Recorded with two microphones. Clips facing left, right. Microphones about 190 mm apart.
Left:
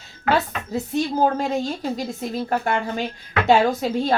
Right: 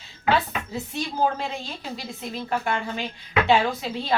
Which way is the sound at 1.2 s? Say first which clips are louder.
Left 2 dB; 45° left (ahead or behind).